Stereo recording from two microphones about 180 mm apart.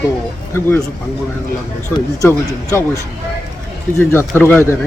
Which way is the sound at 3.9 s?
10° left (ahead or behind).